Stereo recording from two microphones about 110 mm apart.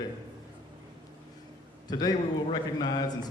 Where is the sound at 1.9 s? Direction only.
40° left (ahead or behind).